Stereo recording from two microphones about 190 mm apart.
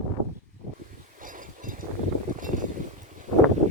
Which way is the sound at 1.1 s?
45° right (ahead or behind).